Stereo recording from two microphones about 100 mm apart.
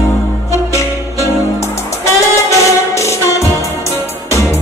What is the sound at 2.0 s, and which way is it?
Music, 30° left (ahead or behind).